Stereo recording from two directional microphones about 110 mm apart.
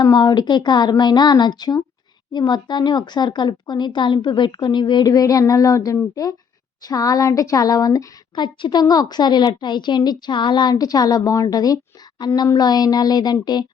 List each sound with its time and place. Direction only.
0.0 s a woman's voice: 40° left (ahead or behind)